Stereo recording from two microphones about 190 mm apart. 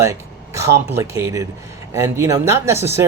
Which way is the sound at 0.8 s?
15° right (ahead or behind).